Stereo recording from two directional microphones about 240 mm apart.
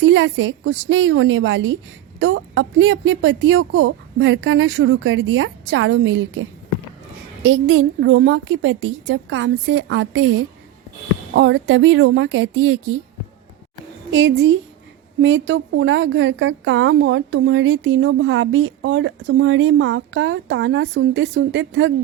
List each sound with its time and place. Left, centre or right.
0.0 s a woman's voice: right
7.4 s a woman's voice: right
14.1 s a woman's voice: right